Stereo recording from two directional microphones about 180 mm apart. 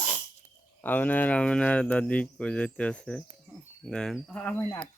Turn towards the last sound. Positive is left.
turn(degrees=10)  # may be behind; listen again after turning